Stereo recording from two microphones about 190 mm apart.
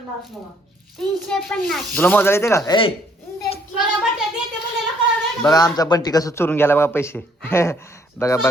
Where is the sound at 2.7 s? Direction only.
25° left (ahead or behind).